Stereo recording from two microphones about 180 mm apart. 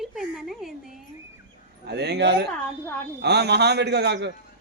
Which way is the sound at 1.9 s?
65° right (ahead or behind).